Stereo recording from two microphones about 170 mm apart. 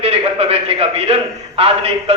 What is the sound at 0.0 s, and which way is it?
A man's voice, 35° right (ahead or behind).